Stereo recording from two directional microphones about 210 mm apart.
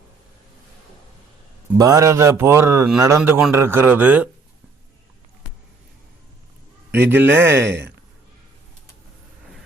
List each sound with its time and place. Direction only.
1.8 s speech: 15° right (ahead or behind)
6.9 s speech: 10° right (ahead or behind)
7.7 s speech: 55° right (ahead or behind)